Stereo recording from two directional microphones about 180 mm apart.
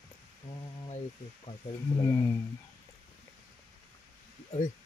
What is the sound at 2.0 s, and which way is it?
Speech, 20° left (ahead or behind).